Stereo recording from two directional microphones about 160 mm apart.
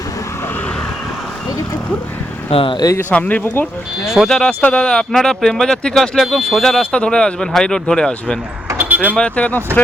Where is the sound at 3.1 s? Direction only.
10° left (ahead or behind).